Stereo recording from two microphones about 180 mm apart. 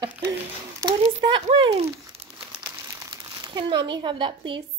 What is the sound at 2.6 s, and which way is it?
Crumpling, 20° right (ahead or behind).